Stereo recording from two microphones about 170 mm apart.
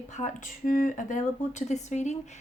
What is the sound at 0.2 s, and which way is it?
Speech, 50° left (ahead or behind).